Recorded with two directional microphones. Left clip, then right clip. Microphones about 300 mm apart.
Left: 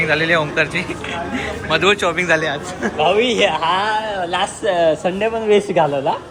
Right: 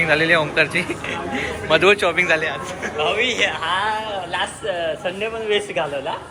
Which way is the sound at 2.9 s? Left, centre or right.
Left.